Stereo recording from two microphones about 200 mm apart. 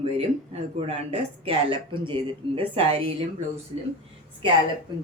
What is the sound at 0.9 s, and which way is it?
Speech, 30° right (ahead or behind).